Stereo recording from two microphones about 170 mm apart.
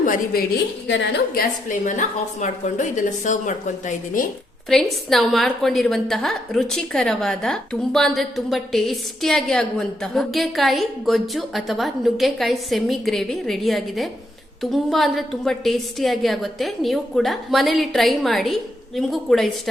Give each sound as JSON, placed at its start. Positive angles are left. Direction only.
{"t": 0.0, "sound": "a woman's voice", "side_deg": 50}
{"t": 0.9, "sound": "a woman's voice", "side_deg": 85}
{"t": 4.7, "sound": "a woman's voice", "side_deg": 0}